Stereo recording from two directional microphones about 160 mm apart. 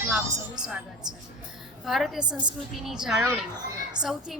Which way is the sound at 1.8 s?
Centre (ahead or behind).